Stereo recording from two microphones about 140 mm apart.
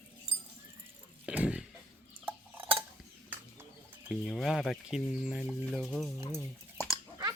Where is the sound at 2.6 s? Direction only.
40° right (ahead or behind).